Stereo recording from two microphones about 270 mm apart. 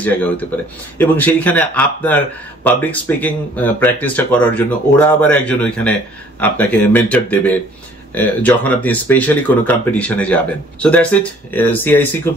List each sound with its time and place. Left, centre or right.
0.0 s speech: centre